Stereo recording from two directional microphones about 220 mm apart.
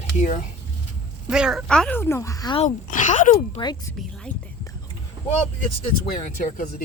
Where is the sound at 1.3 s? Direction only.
5° right (ahead or behind); by 2.6 s 20° left (ahead or behind).